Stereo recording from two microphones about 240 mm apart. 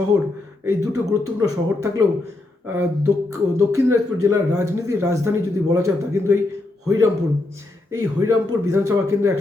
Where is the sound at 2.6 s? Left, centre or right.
Centre.